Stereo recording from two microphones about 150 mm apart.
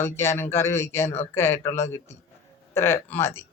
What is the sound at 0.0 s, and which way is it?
Speech, 15° left (ahead or behind).